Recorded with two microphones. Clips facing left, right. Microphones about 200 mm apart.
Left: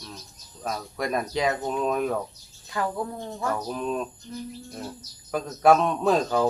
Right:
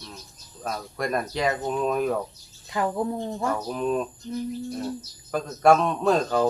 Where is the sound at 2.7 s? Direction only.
20° right (ahead or behind).